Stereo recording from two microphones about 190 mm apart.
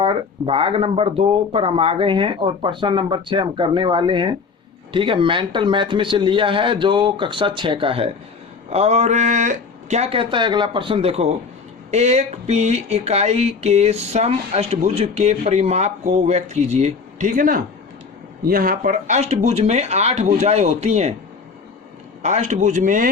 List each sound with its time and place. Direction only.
0.0 s speech: 30° right (ahead or behind)
22.2 s speech: 35° right (ahead or behind)